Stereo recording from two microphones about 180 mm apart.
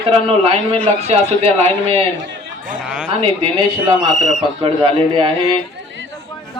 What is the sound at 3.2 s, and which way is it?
Speech, 30° right (ahead or behind).